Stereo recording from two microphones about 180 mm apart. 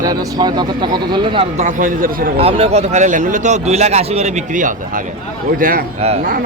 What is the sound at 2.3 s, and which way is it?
A man's voice, 35° right (ahead or behind).